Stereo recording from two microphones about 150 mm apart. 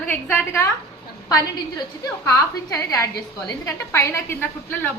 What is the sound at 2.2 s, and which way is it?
A woman's voice, 20° left (ahead or behind).